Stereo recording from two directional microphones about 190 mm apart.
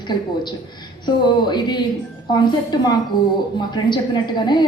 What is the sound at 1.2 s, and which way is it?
Speech, 25° left (ahead or behind).